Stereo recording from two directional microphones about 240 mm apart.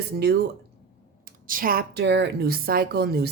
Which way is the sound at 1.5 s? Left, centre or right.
Right.